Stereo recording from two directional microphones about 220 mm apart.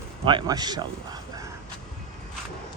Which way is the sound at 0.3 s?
20° right (ahead or behind).